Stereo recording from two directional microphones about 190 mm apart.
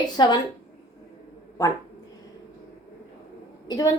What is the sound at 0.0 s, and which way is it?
Speech, 25° left (ahead or behind).